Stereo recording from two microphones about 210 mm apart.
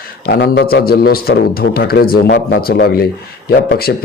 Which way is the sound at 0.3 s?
50° left (ahead or behind).